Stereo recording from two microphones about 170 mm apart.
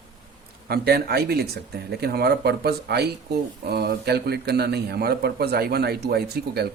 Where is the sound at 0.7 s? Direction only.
65° right (ahead or behind).